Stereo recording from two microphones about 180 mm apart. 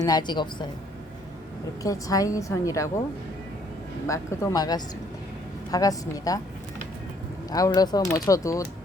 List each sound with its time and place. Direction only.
0.0 s speech: 25° left (ahead or behind)
1.8 s a woman's voice: 20° left (ahead or behind)
4.0 s speech: 15° left (ahead or behind)
7.5 s speech: 20° left (ahead or behind)